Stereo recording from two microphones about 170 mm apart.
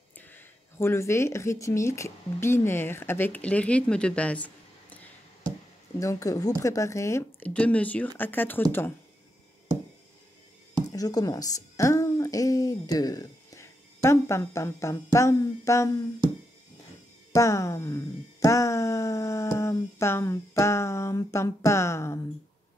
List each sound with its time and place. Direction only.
0.2 s speech: 10° left (ahead or behind)
5.9 s speech: 20° left (ahead or behind)
10.9 s a woman's voice: 20° left (ahead or behind)
17.3 s speech: 15° left (ahead or behind)